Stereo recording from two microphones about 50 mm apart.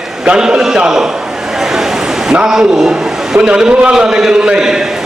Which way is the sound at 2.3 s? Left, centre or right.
Centre.